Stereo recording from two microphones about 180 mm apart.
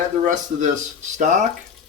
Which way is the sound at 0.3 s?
45° right (ahead or behind).